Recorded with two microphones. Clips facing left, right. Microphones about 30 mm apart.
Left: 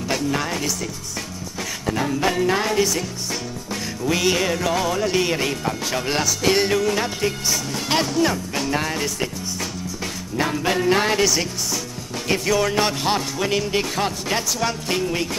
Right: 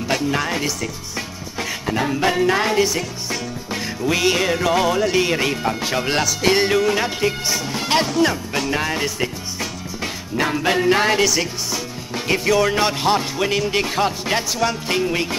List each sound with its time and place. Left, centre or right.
0.1 s speech: centre
1.6 s music: centre
5.0 s speech: centre
10.4 s speech: centre
12.3 s speech: centre
13.7 s music: centre
14.9 s speech: centre